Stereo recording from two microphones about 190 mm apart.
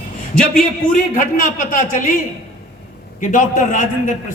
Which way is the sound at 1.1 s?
45° left (ahead or behind).